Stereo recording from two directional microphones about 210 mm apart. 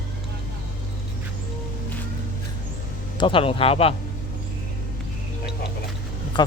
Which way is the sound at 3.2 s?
25° left (ahead or behind).